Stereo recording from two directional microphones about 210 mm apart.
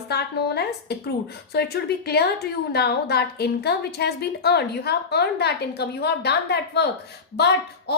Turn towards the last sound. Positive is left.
turn(degrees=50)  # may be behind; listen again after turning